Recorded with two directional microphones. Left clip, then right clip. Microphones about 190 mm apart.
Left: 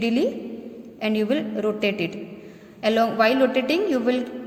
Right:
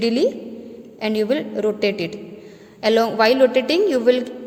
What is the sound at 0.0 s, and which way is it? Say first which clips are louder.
A woman's voice: right 4 dB; 30° right (ahead or behind).